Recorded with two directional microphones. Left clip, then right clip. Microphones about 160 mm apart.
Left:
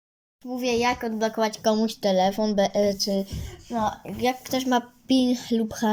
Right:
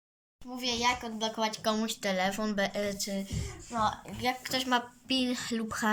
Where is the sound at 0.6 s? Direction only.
50° left (ahead or behind); by 3.0 s 35° left (ahead or behind).